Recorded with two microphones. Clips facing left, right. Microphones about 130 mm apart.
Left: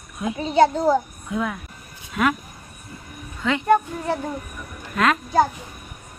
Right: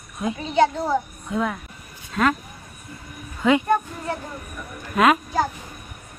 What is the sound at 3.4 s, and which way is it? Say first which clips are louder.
Speech: right 5 dB; 10° right (ahead or behind).